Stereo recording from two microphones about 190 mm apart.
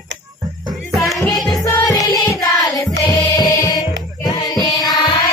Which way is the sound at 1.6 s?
15° left (ahead or behind).